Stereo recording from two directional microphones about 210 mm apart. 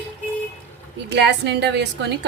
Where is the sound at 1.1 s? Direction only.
50° right (ahead or behind).